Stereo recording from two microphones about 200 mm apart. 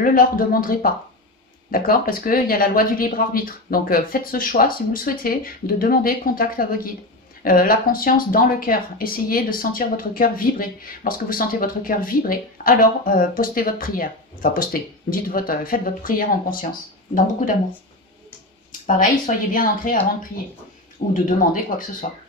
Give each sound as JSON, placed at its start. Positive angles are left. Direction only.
{"t": 0.0, "sound": "speech", "side_deg": 45}
{"t": 19.2, "sound": "speech", "side_deg": 45}
{"t": 21.1, "sound": "speech", "side_deg": 40}